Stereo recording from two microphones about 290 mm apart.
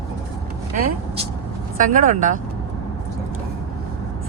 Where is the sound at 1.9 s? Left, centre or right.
Right.